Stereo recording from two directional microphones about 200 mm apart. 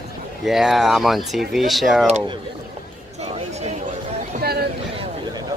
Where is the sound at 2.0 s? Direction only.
30° right (ahead or behind).